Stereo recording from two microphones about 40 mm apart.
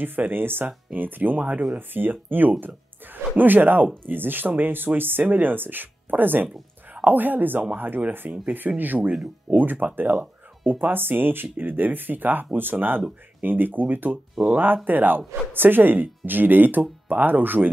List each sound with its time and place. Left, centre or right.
0.0 s speech: right
1.8 s speech: right
8.5 s speech: right